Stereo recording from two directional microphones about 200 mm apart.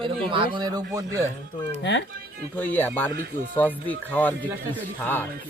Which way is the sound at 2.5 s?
10° left (ahead or behind).